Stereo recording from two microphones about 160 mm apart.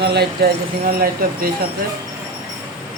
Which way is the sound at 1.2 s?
65° right (ahead or behind).